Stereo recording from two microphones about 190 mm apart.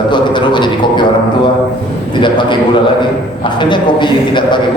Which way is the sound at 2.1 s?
25° left (ahead or behind).